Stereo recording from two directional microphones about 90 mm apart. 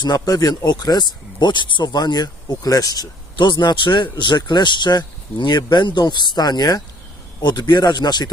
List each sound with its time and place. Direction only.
0.0 s speech: 45° left (ahead or behind)